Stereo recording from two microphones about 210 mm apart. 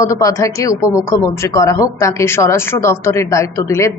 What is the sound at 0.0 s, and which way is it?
A woman's voice, 15° left (ahead or behind).